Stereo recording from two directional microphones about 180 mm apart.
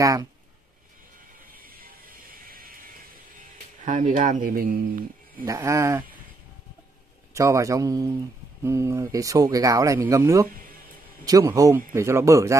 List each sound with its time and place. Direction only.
0.0 s speech: 20° right (ahead or behind)
1.5 s music: 55° right (ahead or behind)
3.8 s speech: 45° right (ahead or behind)
5.4 s speech: 15° right (ahead or behind)
7.3 s speech: 15° right (ahead or behind)